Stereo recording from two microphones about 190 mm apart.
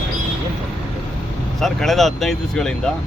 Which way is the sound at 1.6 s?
Centre (ahead or behind).